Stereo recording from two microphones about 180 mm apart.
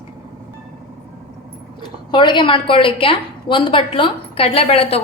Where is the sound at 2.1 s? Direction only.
25° left (ahead or behind).